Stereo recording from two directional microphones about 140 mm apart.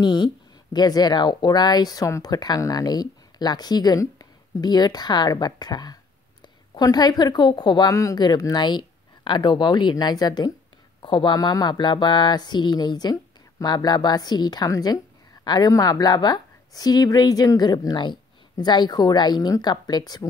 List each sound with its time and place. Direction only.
0.0 s speech: 30° left (ahead or behind)